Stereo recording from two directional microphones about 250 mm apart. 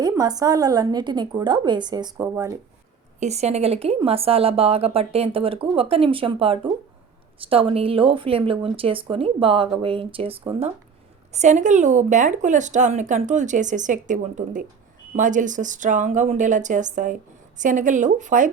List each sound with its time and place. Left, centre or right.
0.0 s a woman's voice: centre
3.2 s speech: right